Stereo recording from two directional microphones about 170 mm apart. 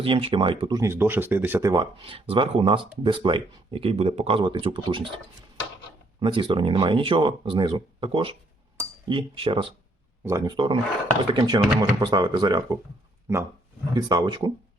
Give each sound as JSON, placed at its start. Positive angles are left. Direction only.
{"t": 0.0, "sound": "speech", "side_deg": -30}
{"t": 1.8, "sound": "speech", "side_deg": -30}
{"t": 10.2, "sound": "speech", "side_deg": -20}